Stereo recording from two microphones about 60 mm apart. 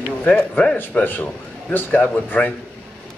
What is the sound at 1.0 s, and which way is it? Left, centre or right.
A man's voice, left.